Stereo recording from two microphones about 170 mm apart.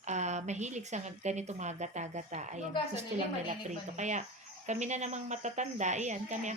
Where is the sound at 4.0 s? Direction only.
45° right (ahead or behind).